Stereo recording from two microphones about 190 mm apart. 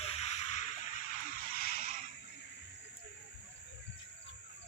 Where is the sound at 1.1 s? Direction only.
50° left (ahead or behind).